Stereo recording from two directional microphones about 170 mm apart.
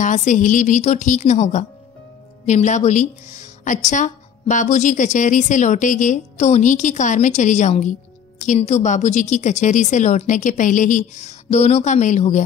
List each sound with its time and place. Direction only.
0.0 s speech: 45° left (ahead or behind)